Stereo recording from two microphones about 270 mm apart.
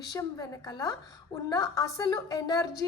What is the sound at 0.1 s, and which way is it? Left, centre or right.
A woman's voice, centre.